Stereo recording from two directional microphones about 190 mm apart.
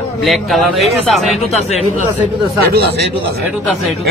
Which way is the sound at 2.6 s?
55° right (ahead or behind).